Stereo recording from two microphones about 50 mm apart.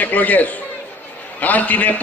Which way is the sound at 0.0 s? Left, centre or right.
Left.